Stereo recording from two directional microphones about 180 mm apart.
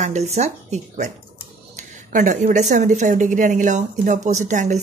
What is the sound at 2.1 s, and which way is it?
A woman's voice, 45° right (ahead or behind).